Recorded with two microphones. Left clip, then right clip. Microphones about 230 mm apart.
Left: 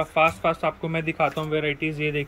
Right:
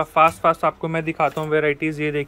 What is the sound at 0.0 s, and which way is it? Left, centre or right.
Speech, centre.